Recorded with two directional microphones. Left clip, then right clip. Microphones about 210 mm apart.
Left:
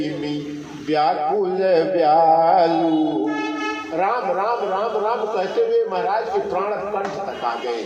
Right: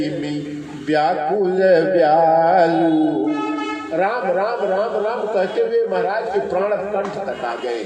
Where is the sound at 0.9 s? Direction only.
40° right (ahead or behind).